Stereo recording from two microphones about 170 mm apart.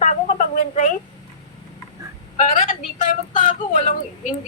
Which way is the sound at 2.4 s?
50° left (ahead or behind).